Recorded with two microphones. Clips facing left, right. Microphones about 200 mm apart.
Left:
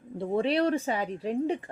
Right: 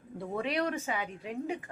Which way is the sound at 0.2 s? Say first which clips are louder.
Left 7 dB; 30° left (ahead or behind).